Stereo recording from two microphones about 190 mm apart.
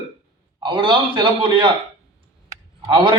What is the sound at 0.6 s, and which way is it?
A man's voice, 25° right (ahead or behind).